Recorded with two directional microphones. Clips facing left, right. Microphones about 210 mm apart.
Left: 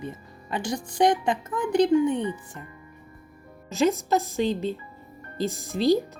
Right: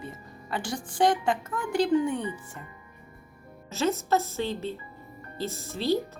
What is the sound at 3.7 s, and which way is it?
Speech, 15° left (ahead or behind).